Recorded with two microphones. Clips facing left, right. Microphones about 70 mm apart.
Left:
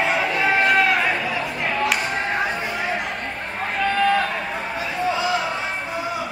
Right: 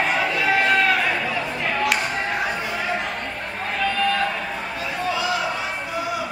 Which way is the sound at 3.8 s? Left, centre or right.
Left.